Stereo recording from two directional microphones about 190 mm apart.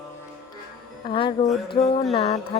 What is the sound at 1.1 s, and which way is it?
Speech, 30° left (ahead or behind).